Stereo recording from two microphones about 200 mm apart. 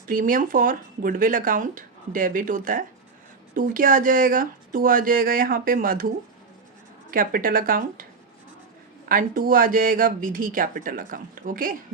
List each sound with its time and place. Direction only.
0.1 s speech: 45° right (ahead or behind)
7.1 s speech: 45° right (ahead or behind)
9.0 s speech: 45° right (ahead or behind)